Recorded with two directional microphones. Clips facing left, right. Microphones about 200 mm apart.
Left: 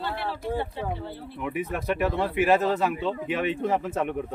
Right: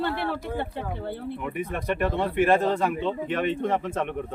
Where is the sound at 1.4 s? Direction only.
5° left (ahead or behind).